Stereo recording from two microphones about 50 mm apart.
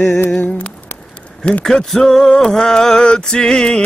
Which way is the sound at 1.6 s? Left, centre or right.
Centre.